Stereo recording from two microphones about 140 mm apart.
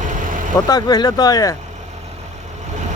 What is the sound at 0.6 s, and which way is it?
Speech, 30° left (ahead or behind).